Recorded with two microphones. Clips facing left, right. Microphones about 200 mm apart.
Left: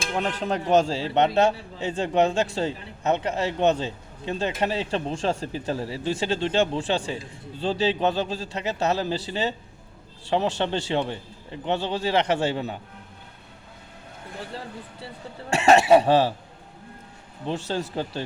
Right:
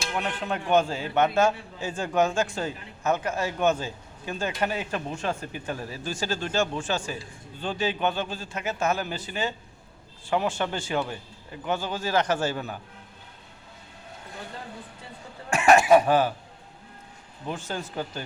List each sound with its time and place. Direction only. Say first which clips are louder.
0.1 s a man's voice: left 4 dB; 30° left (ahead or behind)
15.5 s speech: left 1 dB; 25° left (ahead or behind)
17.5 s a man's voice: left 5 dB; 30° left (ahead or behind)